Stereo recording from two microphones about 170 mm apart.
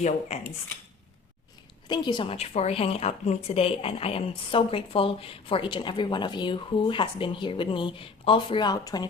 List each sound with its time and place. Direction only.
0.3 s a woman's voice: 35° left (ahead or behind)
1.9 s a woman's voice: 25° left (ahead or behind)